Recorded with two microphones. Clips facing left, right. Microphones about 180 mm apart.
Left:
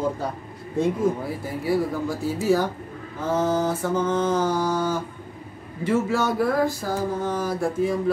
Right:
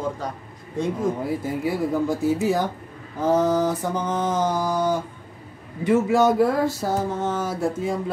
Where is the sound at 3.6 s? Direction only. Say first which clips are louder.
Left 1 dB; 15° right (ahead or behind).